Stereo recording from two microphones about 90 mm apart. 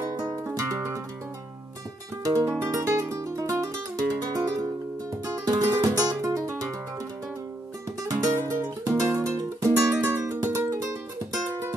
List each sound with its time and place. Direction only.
0.0 s music: 45° right (ahead or behind)
2.2 s music: 40° right (ahead or behind)
8.0 s music: 40° right (ahead or behind)